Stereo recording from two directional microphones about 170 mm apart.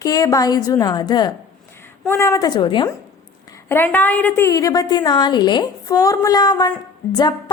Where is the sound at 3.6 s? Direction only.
10° left (ahead or behind).